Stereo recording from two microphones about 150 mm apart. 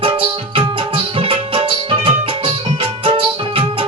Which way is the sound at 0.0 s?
35° right (ahead or behind).